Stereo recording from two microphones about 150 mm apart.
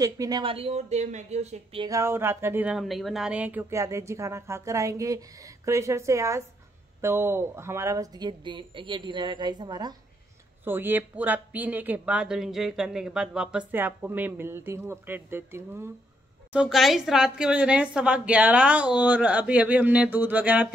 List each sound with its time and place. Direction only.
0.0 s speech: 25° right (ahead or behind)
0.4 s speech: 40° right (ahead or behind)
1.9 s speech: 20° right (ahead or behind)
10.6 s a woman's voice: 15° right (ahead or behind)
16.5 s a woman's voice: centre (ahead or behind)